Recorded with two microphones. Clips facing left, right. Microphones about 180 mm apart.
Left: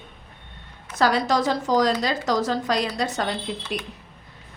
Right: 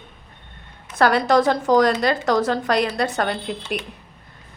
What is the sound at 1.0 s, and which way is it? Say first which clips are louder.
A woman's voice: right 4 dB; 60° right (ahead or behind).